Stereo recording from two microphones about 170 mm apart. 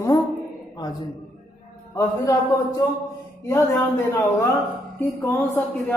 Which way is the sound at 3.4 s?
15° left (ahead or behind).